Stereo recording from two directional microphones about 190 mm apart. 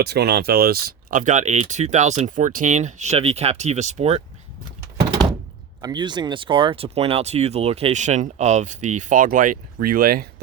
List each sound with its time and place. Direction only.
0.0 s speech: 60° right (ahead or behind); by 4.2 s 35° right (ahead or behind)
5.8 s speech: 25° right (ahead or behind); by 10.2 s 50° right (ahead or behind)